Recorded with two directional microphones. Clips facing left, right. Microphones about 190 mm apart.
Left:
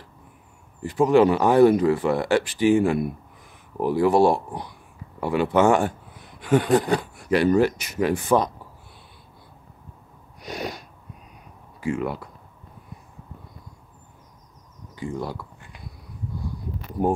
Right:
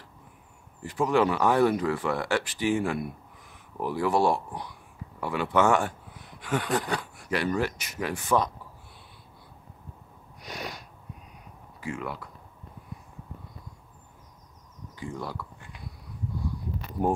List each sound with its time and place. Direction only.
0.8 s speech: 25° left (ahead or behind)
10.5 s sneeze: 30° left (ahead or behind)
11.8 s speech: 25° left (ahead or behind)
15.0 s speech: 20° left (ahead or behind)